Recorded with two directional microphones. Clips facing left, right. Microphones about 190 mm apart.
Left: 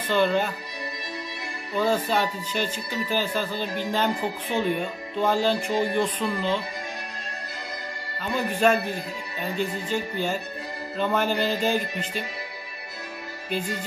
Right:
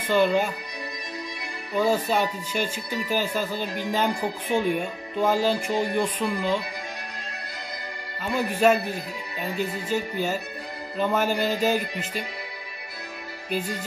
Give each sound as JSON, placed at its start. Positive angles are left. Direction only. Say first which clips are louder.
{"t": 0.0, "sound": "speech", "louder": "right 1 dB", "side_deg": -10}
{"t": 1.8, "sound": "speech", "louder": "right 1 dB", "side_deg": -10}
{"t": 8.3, "sound": "speech", "louder": "right 1 dB", "side_deg": -10}